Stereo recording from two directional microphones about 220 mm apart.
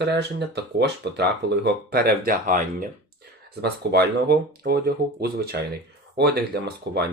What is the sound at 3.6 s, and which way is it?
Speech, 45° right (ahead or behind).